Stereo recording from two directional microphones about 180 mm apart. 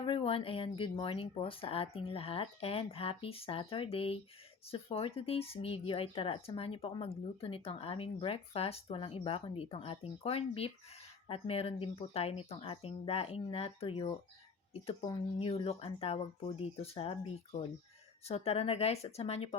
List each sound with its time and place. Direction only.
0.0 s speech: 30° left (ahead or behind)